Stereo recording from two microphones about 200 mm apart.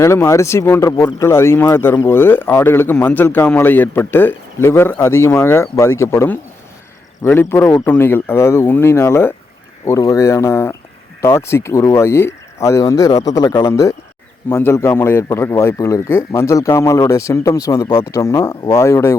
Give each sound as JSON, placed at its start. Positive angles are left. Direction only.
{"t": 0.0, "sound": "speech", "side_deg": 15}